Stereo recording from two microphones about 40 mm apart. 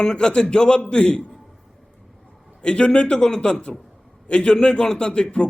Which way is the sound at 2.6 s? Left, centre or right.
Left.